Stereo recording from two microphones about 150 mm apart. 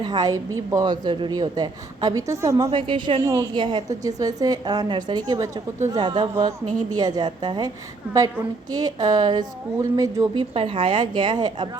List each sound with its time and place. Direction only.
0.0 s a woman's voice: 30° right (ahead or behind)
2.6 s a woman's voice: 35° right (ahead or behind)
3.2 s a woman's voice: 20° right (ahead or behind)
8.7 s a woman's voice: 25° right (ahead or behind)
10.5 s a woman's voice: 40° right (ahead or behind)